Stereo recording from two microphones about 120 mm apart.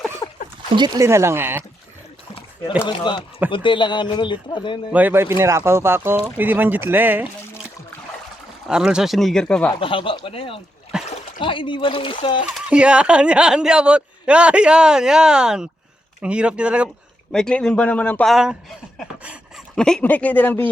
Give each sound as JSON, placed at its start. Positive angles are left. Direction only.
{"t": 0.2, "sound": "a sound", "side_deg": 30}
{"t": 0.9, "sound": "speech", "side_deg": -20}
{"t": 2.8, "sound": "speech", "side_deg": 40}
{"t": 4.9, "sound": "a man's voice", "side_deg": -15}
{"t": 8.6, "sound": "speech", "side_deg": -5}
{"t": 9.8, "sound": "speech", "side_deg": 45}
{"t": 10.9, "sound": "splash", "side_deg": -5}
{"t": 11.3, "sound": "speech", "side_deg": 45}
{"t": 12.7, "sound": "a man's voice", "side_deg": -10}
{"t": 17.3, "sound": "speech", "side_deg": 5}
{"t": 18.3, "sound": "speech", "side_deg": -5}
{"t": 19.7, "sound": "speech", "side_deg": 5}